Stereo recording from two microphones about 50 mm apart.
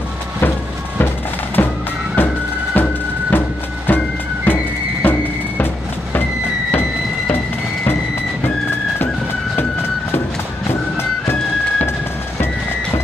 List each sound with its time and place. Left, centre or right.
1.6 s music: left
10.7 s music: left